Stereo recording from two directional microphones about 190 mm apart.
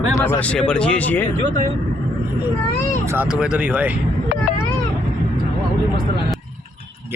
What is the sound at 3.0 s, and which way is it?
Speech, 5° right (ahead or behind).